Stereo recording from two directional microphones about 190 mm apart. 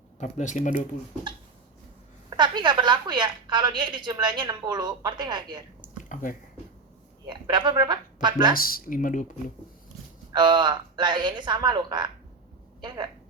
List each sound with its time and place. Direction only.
0.2 s speech: 40° left (ahead or behind)
2.3 s a woman's voice: 25° right (ahead or behind)
6.0 s a sound: 40° left (ahead or behind)
7.3 s a woman's voice: 25° right (ahead or behind)
8.5 s speech: 50° left (ahead or behind)
10.3 s a woman's voice: 25° right (ahead or behind)